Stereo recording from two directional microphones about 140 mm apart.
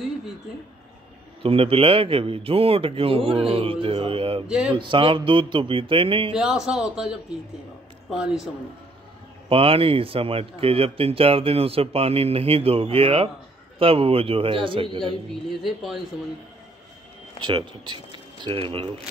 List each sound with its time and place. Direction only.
1.4 s a man's voice: 45° right (ahead or behind)
4.5 s speech: 10° right (ahead or behind)
4.7 s a man's voice: 40° right (ahead or behind)
6.3 s speech: 5° right (ahead or behind)
9.5 s a man's voice: 40° right (ahead or behind)
15.2 s speech: centre (ahead or behind)
17.4 s speech: 35° right (ahead or behind)